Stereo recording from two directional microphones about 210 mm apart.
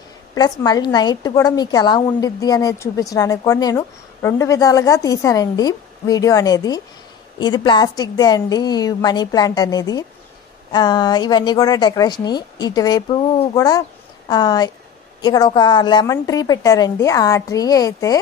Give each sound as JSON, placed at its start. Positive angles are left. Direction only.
{"t": 0.3, "sound": "a woman's voice", "side_deg": 20}